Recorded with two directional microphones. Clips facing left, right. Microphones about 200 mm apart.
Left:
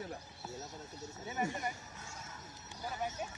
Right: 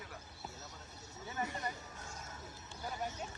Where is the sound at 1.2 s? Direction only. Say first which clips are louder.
Left 3 dB; 20° left (ahead or behind).